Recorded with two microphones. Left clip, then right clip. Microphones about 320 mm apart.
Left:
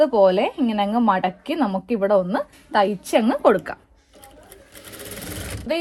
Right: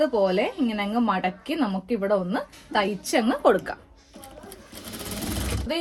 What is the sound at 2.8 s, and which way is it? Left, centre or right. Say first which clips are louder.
Speech: left 5 dB; centre.